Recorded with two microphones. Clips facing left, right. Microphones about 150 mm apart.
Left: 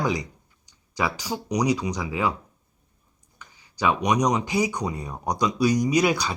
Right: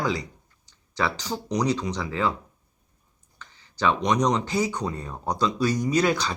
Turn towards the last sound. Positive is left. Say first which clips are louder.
# left 1 dB
turn(degrees=10)  # may be behind; listen again after turning